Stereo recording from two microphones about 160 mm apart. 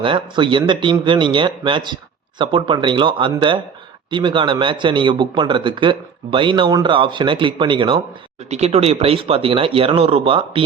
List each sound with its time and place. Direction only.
0.0 s a man's voice: 30° right (ahead or behind)
8.4 s a man's voice: 40° right (ahead or behind)